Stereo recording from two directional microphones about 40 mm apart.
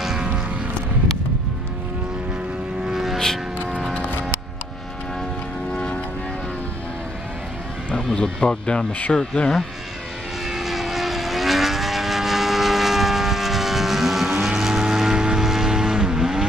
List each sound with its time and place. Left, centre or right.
0.0 s music: centre
2.9 s vehicle: centre
5.7 s vehicle: left
7.9 s speech: centre
10.5 s vehicle: centre